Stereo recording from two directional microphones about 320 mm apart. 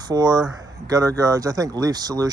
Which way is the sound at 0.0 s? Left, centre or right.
Centre.